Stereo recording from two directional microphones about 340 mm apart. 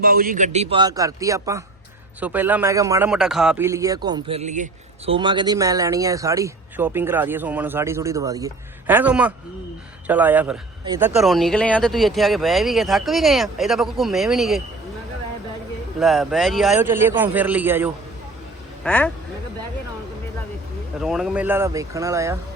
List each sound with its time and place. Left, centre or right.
0.0 s a man's voice: right; by 14.6 s centre
16.0 s a man's voice: centre
21.0 s a man's voice: centre